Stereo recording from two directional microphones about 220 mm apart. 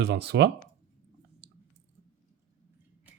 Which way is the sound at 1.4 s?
50° right (ahead or behind).